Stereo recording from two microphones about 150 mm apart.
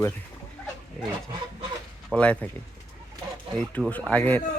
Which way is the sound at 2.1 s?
10° left (ahead or behind).